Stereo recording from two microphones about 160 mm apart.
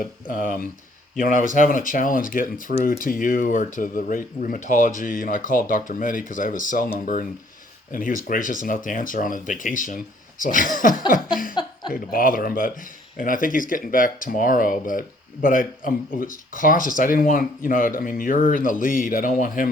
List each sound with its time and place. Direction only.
0.0 s speech: 60° left (ahead or behind)